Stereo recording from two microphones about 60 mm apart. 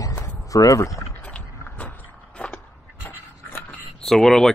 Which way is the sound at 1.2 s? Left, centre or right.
Left.